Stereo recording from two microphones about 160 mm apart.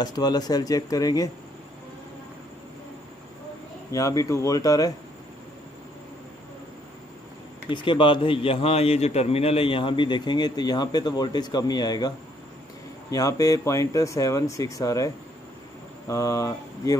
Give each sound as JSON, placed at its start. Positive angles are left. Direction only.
{"t": 0.0, "sound": "speech", "side_deg": 25}
{"t": 3.9, "sound": "speech", "side_deg": 20}
{"t": 7.7, "sound": "a man's voice", "side_deg": 30}
{"t": 13.1, "sound": "speech", "side_deg": 20}
{"t": 16.1, "sound": "speech", "side_deg": 20}